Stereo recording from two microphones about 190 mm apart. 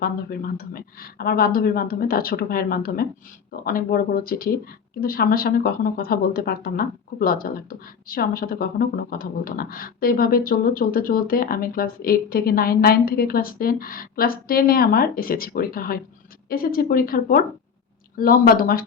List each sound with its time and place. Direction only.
0.0 s speech: 50° left (ahead or behind)